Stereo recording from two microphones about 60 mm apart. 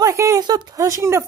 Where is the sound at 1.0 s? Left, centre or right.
Right.